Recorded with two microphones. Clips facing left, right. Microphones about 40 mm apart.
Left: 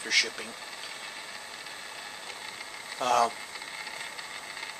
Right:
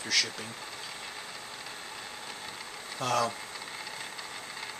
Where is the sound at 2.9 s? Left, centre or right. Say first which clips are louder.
Left 4 dB; centre.